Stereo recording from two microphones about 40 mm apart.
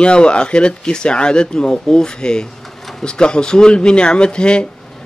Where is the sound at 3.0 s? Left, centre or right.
Left.